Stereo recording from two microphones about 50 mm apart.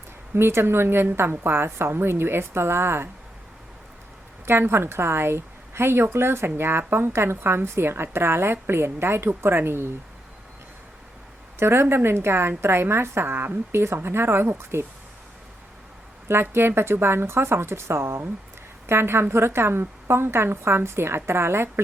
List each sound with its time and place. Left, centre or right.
0.3 s a woman's voice: right
4.4 s a woman's voice: right
11.6 s a woman's voice: right
14.7 s a woman's voice: right
16.3 s a woman's voice: right